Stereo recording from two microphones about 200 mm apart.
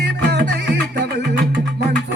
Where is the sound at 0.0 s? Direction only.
55° right (ahead or behind).